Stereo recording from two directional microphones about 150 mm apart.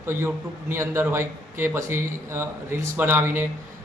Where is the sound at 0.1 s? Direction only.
15° right (ahead or behind).